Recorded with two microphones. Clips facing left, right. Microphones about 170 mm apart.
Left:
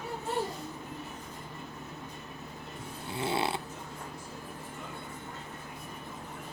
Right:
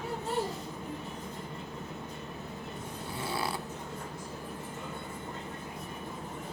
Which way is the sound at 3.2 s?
25° left (ahead or behind).